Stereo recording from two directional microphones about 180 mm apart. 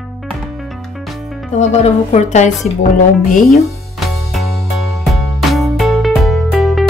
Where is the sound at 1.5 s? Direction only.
40° left (ahead or behind).